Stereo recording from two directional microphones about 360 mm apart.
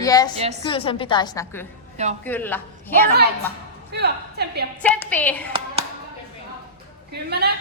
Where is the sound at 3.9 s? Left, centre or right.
Right.